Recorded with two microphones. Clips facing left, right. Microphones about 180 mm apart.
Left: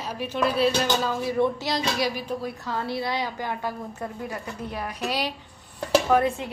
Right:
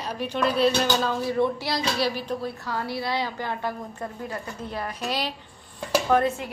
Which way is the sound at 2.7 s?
20° left (ahead or behind).